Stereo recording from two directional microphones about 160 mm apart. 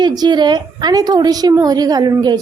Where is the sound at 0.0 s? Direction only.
25° right (ahead or behind).